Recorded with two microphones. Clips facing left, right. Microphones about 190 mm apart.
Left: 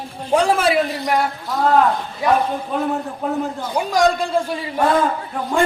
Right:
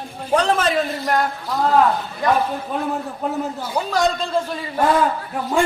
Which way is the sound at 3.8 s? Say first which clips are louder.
Left 3 dB; 15° left (ahead or behind).